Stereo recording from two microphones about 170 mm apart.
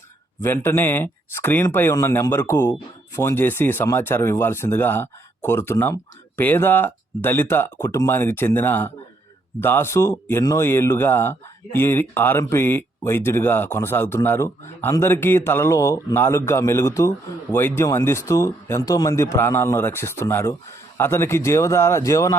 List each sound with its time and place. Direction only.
0.4 s speech: 15° left (ahead or behind)